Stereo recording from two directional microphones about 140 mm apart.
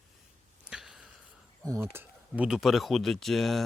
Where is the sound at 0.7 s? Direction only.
5° right (ahead or behind).